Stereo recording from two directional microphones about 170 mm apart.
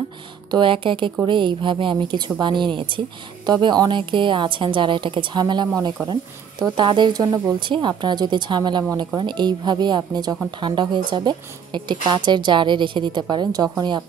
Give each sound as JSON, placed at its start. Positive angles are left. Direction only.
{"t": 0.5, "sound": "speech", "side_deg": -30}